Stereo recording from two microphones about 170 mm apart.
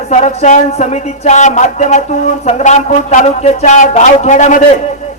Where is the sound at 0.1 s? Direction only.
45° left (ahead or behind).